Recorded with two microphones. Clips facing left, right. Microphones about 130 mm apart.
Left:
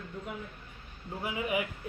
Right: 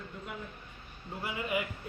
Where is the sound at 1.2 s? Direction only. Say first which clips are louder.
Left 2 dB; 10° left (ahead or behind).